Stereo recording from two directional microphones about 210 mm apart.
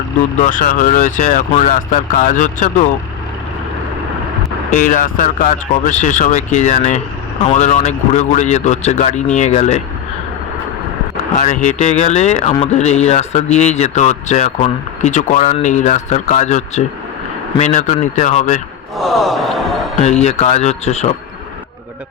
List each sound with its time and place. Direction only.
0.3 s speech: 40° left (ahead or behind)
4.7 s speech: 40° left (ahead or behind)
11.3 s speech: 35° left (ahead or behind)
18.9 s a sound: centre (ahead or behind)
20.0 s speech: 30° left (ahead or behind)